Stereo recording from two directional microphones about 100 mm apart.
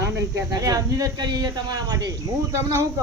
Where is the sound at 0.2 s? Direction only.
35° right (ahead or behind).